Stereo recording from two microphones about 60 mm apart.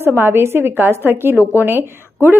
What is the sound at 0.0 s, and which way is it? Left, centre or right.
Speech, right.